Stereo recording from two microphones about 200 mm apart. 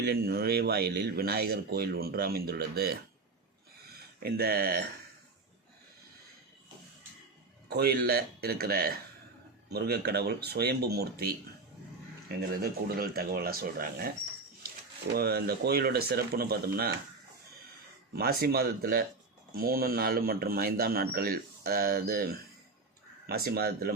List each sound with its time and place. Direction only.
0.0 s speech: 50° right (ahead or behind)
4.2 s speech: 50° right (ahead or behind)
7.7 s speech: 50° right (ahead or behind)
15.1 s speech: 50° right (ahead or behind)
18.1 s speech: 50° right (ahead or behind)